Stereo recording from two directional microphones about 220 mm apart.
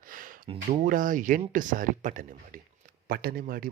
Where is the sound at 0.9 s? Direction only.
40° right (ahead or behind).